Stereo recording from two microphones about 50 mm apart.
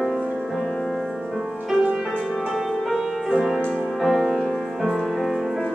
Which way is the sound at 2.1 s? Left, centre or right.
Centre.